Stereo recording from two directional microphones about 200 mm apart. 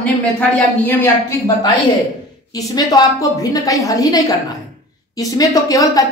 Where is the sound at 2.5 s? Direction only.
15° left (ahead or behind).